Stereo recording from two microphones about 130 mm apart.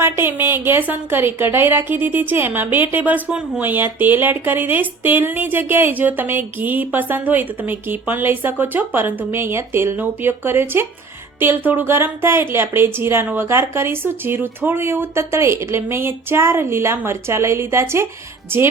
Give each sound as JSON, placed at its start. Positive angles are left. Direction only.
{"t": 0.0, "sound": "speech", "side_deg": -15}